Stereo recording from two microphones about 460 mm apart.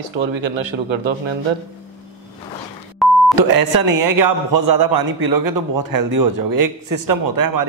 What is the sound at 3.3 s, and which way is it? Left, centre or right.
A man's voice, right.